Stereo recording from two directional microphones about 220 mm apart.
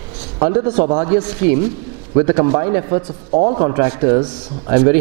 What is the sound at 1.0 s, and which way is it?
A man's voice, 10° right (ahead or behind).